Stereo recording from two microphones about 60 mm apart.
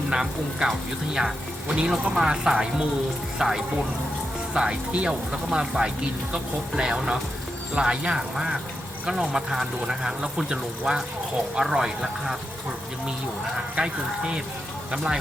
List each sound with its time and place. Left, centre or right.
0.1 s speech: centre
13.7 s speech: centre